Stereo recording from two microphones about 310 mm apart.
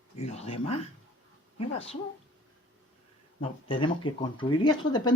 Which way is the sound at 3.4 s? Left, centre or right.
Centre.